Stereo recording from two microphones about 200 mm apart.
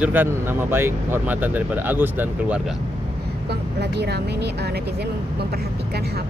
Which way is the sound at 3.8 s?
55° right (ahead or behind).